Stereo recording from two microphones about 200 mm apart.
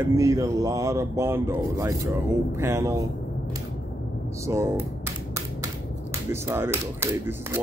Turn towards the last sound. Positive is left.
turn(degrees=-10)  # may be behind; listen again after turning